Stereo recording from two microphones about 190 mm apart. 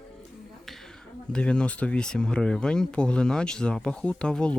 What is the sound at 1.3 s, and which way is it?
Speech, 5° left (ahead or behind).